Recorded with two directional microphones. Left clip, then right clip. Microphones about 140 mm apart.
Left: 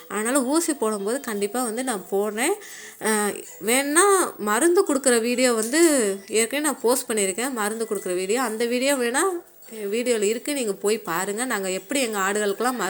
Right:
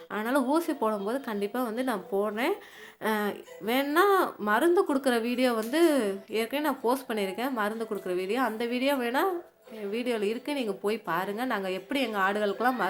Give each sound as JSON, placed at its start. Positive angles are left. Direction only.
{"t": 0.1, "sound": "speech", "side_deg": 25}